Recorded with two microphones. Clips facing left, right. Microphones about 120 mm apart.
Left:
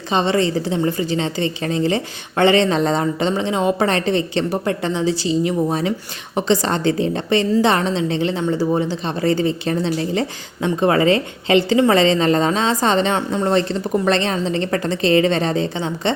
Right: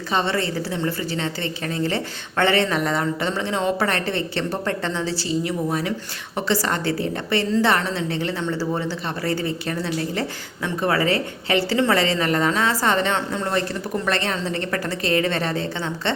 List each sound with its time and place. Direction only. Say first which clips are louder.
0.1 s speech: left 5 dB; 20° left (ahead or behind)